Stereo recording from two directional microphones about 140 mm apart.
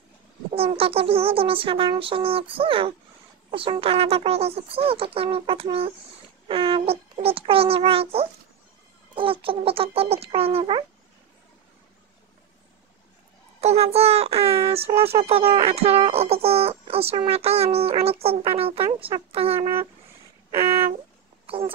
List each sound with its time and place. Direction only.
0.5 s speech: 45° right (ahead or behind)
13.6 s speech: 50° right (ahead or behind)
21.5 s speech: 40° right (ahead or behind)